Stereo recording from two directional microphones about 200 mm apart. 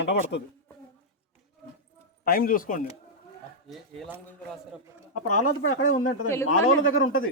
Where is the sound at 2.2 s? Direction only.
50° left (ahead or behind).